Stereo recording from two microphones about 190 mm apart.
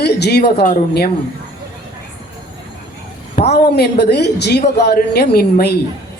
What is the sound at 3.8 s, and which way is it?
A woman's voice, 60° left (ahead or behind).